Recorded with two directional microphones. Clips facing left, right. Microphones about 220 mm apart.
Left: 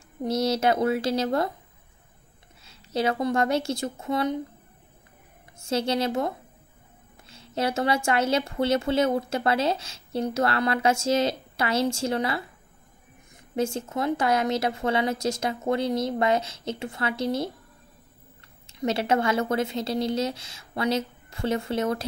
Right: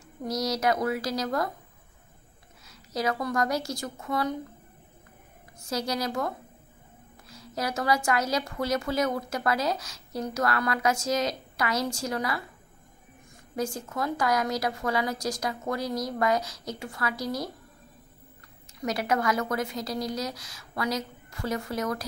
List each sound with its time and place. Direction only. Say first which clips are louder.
0.2 s speech: left 4 dB; 30° left (ahead or behind)
2.6 s speech: left 4 dB; 30° left (ahead or behind)
5.6 s speech: left 5 dB; 25° left (ahead or behind)
13.6 s speech: left 4 dB; 25° left (ahead or behind)
18.7 s speech: left 4 dB; 25° left (ahead or behind)